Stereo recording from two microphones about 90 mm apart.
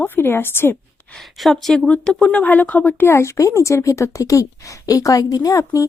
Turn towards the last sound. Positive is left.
turn(degrees=40)  # may be behind; listen again after turning